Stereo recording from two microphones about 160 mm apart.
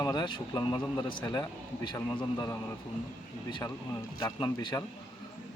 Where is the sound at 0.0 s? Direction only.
25° left (ahead or behind).